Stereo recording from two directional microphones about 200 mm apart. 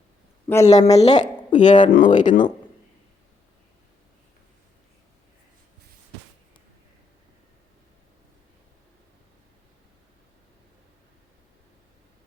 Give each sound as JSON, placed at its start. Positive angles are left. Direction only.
{"t": 0.4, "sound": "a man's voice", "side_deg": 15}
{"t": 0.7, "sound": "speech", "side_deg": 35}